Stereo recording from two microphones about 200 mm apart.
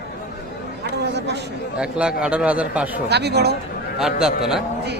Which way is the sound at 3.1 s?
55° right (ahead or behind).